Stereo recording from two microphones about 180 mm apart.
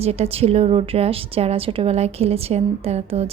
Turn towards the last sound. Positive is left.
turn(degrees=-35)  # may be behind; listen again after turning